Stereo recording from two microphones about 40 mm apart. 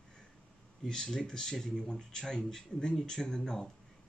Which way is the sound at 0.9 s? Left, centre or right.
Centre.